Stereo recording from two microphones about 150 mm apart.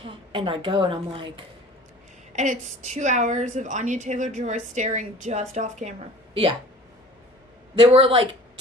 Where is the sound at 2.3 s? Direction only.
55° right (ahead or behind).